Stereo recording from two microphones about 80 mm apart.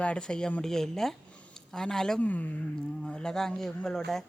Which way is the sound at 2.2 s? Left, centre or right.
Centre.